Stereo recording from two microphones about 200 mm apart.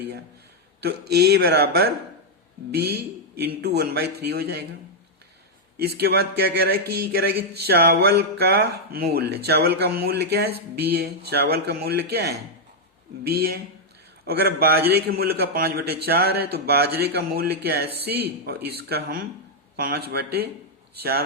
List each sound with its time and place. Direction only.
0.8 s a man's voice: 55° right (ahead or behind)
5.8 s a man's voice: 50° right (ahead or behind)
7.7 s a man's voice: 50° right (ahead or behind)